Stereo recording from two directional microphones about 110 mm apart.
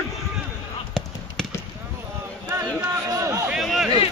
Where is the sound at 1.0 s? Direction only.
5° left (ahead or behind).